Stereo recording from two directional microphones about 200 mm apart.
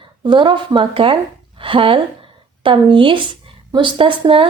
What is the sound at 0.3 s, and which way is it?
A woman's voice, 25° right (ahead or behind).